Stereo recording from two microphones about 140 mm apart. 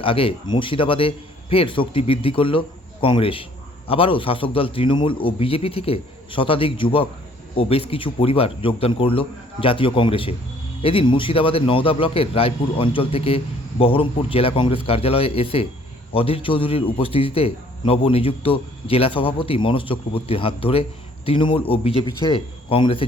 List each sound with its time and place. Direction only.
0.0 s a man's voice: 40° left (ahead or behind)